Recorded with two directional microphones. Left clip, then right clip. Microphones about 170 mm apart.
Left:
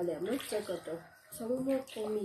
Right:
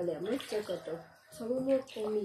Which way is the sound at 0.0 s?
Centre (ahead or behind).